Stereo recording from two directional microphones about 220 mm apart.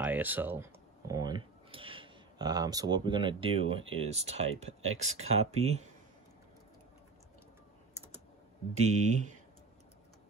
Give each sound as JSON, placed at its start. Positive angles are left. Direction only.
{"t": 0.0, "sound": "speech", "side_deg": -10}
{"t": 8.7, "sound": "speech", "side_deg": -30}